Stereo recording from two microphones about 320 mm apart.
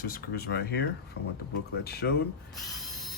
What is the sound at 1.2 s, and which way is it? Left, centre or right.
Speech, left.